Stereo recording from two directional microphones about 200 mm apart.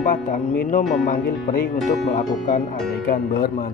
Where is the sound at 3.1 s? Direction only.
50° left (ahead or behind).